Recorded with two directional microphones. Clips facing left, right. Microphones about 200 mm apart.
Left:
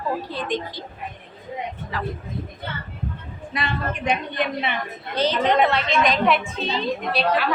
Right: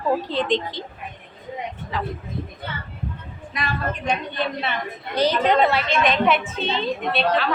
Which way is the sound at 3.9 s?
15° left (ahead or behind).